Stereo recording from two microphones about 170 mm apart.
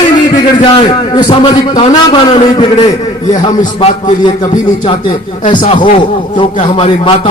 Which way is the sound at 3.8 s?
45° left (ahead or behind).